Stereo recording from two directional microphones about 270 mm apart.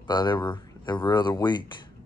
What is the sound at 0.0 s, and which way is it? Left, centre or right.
Speech, centre.